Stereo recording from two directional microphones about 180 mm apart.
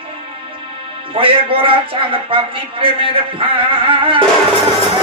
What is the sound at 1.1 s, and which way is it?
A man's voice, 30° right (ahead or behind).